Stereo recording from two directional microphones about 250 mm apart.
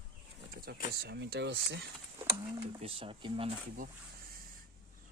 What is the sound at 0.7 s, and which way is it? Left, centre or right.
Speech, right.